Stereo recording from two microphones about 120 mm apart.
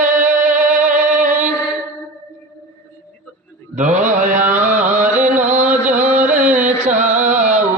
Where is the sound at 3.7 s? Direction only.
90° right.